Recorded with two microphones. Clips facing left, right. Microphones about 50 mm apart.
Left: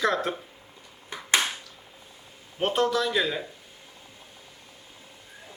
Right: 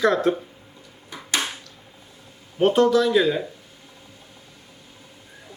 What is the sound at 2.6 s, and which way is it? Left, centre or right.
Speech, centre.